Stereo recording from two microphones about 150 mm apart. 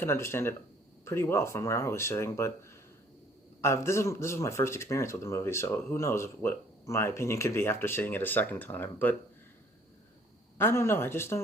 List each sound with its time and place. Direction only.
0.0 s speech: 15° left (ahead or behind)
10.6 s speech: 15° left (ahead or behind)